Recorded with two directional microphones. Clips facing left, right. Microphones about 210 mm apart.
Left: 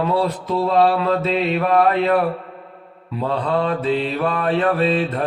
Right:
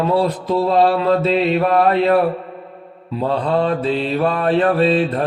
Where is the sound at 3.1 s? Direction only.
35° right (ahead or behind).